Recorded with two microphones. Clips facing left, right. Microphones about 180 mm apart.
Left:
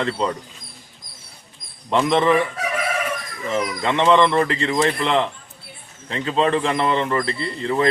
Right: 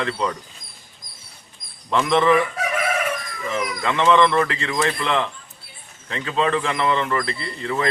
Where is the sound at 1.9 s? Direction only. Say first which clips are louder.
Even; 20° left (ahead or behind).